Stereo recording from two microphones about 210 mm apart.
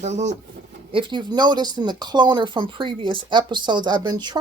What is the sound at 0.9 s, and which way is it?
Speech, 25° right (ahead or behind).